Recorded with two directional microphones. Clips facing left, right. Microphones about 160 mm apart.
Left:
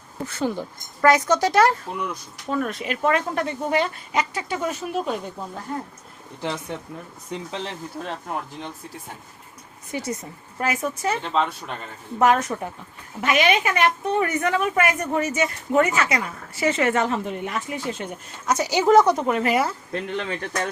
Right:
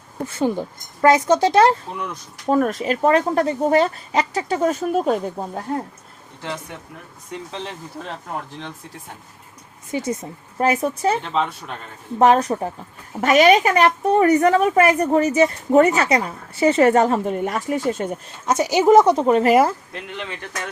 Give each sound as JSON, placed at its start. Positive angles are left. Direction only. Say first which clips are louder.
{"t": 0.3, "sound": "speech", "louder": "right 4 dB", "side_deg": -15}
{"t": 2.5, "sound": "a woman's voice", "louder": "right 7 dB", "side_deg": -40}
{"t": 9.9, "sound": "speech", "louder": "right 5 dB", "side_deg": -20}
{"t": 10.6, "sound": "a woman's voice", "louder": "right 6 dB", "side_deg": -30}
{"t": 12.2, "sound": "a woman's voice", "louder": "right 4 dB", "side_deg": -30}
{"t": 18.4, "sound": "speech", "louder": "right 4 dB", "side_deg": -20}
{"t": 19.9, "sound": "speech", "louder": "left 4 dB", "side_deg": 40}